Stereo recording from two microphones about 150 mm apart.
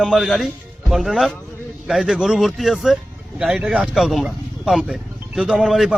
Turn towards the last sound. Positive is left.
turn(degrees=0)  # may be behind; listen again after turning